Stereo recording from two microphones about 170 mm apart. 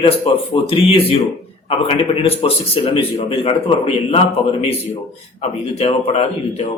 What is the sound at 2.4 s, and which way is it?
Speech, 35° left (ahead or behind).